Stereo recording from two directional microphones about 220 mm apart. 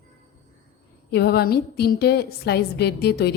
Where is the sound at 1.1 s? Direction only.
45° left (ahead or behind).